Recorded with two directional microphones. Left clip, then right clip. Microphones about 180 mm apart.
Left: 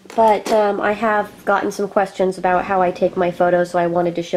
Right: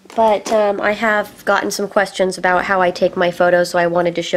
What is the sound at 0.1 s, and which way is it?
A woman's voice, 20° right (ahead or behind).